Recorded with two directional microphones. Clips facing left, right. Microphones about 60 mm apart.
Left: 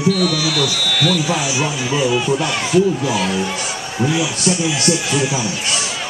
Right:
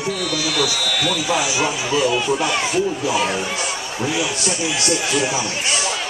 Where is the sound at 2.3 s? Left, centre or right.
Centre.